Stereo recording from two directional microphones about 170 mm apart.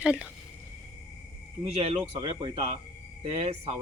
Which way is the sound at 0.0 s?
5° right (ahead or behind).